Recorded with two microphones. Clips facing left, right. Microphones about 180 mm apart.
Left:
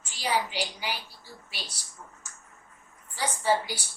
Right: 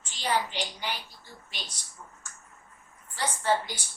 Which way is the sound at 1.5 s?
5° left (ahead or behind).